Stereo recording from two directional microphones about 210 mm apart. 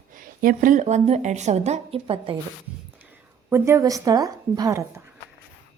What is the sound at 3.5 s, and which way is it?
A woman's voice, 15° right (ahead or behind).